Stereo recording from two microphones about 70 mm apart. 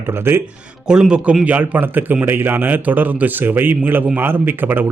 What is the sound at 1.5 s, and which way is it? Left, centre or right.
A man's voice, right.